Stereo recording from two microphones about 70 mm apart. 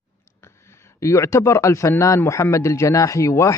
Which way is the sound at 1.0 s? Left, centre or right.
Left.